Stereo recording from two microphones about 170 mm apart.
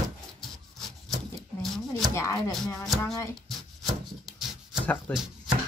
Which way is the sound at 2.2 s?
15° left (ahead or behind).